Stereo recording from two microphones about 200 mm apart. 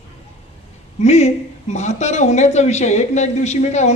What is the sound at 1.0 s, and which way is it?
Speech, 35° left (ahead or behind).